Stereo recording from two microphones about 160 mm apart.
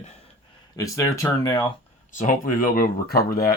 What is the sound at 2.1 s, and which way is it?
Speech, 55° left (ahead or behind).